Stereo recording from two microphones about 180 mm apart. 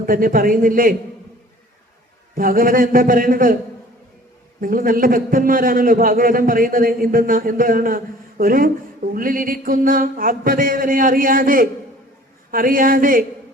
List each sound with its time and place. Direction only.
0.0 s a man's voice: 50° right (ahead or behind)
2.3 s a man's voice: 50° right (ahead or behind)
4.6 s a man's voice: 50° right (ahead or behind)